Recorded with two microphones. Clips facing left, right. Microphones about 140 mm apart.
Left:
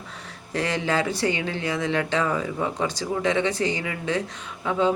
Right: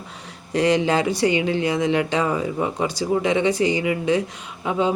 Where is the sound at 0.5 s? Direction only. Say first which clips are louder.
Right 6 dB; 15° right (ahead or behind).